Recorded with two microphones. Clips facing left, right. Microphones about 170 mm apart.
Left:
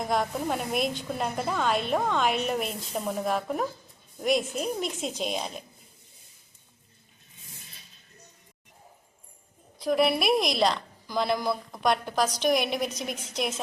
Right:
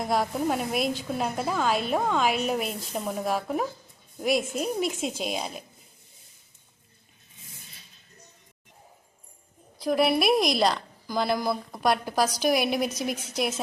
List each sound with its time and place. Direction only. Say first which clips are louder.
0.0 s a woman's voice: right 2 dB; 5° right (ahead or behind)
9.7 s a woman's voice: right 1 dB; centre (ahead or behind)